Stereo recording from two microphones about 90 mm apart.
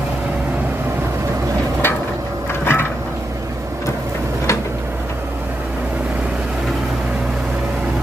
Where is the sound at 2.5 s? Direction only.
25° left (ahead or behind).